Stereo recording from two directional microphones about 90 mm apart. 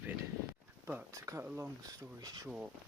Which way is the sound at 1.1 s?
35° right (ahead or behind).